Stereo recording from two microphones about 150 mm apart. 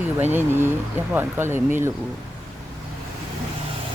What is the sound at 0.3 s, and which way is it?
Speech, 15° right (ahead or behind).